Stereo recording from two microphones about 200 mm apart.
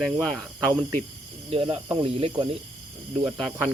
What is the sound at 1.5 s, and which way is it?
Speech, 25° right (ahead or behind).